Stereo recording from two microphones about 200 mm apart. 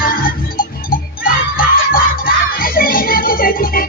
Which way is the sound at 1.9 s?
45° left (ahead or behind).